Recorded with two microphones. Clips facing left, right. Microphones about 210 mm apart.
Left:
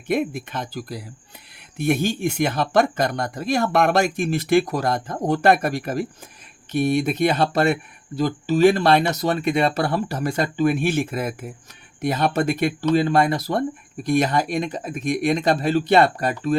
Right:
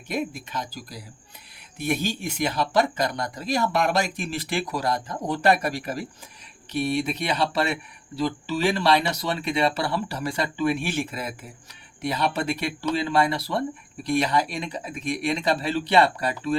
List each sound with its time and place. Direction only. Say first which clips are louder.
0.1 s speech: left 6 dB; 55° left (ahead or behind)